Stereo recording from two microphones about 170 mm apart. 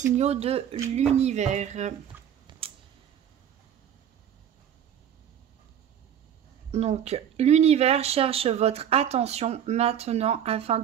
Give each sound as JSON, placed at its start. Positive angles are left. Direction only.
{"t": 0.0, "sound": "speech", "side_deg": -40}
{"t": 6.7, "sound": "speech", "side_deg": -40}